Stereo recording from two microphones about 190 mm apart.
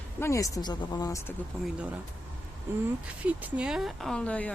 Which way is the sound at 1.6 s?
5° right (ahead or behind).